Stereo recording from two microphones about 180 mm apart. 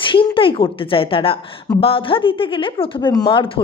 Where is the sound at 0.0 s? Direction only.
25° left (ahead or behind).